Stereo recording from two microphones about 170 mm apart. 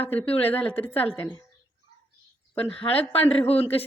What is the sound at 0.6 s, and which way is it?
Speech, 10° left (ahead or behind).